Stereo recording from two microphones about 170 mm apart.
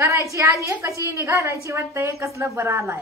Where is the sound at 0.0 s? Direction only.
15° right (ahead or behind).